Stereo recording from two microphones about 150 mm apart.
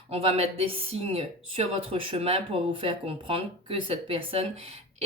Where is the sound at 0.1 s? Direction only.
40° right (ahead or behind).